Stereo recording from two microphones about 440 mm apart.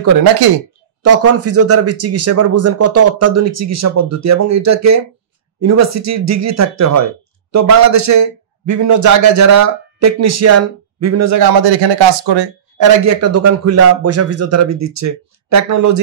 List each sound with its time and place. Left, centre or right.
1.0 s speech: right
11.6 s speech: right
12.7 s speech: right